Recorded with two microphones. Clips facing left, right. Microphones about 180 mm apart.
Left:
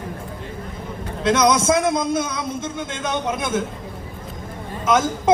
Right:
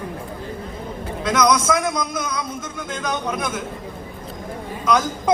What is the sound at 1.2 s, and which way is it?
A man's voice, 25° left (ahead or behind).